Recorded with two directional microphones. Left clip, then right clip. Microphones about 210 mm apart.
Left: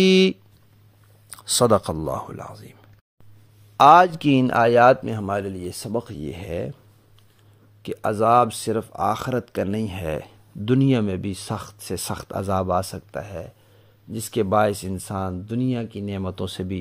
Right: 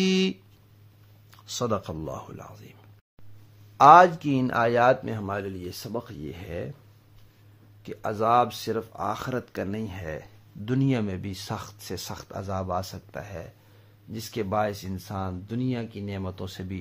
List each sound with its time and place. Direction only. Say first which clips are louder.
0.0 s a man's voice: left 9 dB; 30° left (ahead or behind)
3.7 s a man's voice: left 2 dB; 45° left (ahead or behind)
7.8 s a man's voice: left 6 dB; 35° left (ahead or behind)
10.6 s a man's voice: left 7 dB; 30° left (ahead or behind)